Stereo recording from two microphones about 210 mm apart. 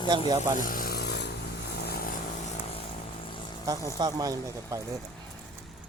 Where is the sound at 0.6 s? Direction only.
40° left (ahead or behind).